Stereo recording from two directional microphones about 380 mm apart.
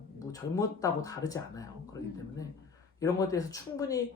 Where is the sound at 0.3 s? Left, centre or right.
Centre.